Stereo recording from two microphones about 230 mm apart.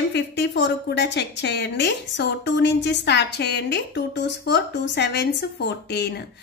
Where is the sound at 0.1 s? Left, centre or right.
Left.